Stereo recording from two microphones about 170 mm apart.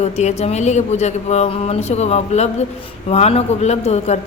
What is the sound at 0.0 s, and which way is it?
Speech, 40° left (ahead or behind).